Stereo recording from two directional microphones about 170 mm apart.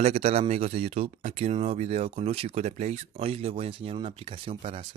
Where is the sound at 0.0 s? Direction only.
40° right (ahead or behind).